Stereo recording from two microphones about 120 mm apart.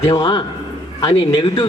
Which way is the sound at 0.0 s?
30° left (ahead or behind).